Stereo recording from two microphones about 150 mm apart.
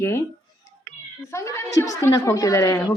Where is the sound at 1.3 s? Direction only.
20° left (ahead or behind).